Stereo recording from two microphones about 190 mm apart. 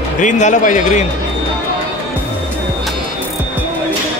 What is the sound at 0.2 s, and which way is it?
Speech, 40° left (ahead or behind).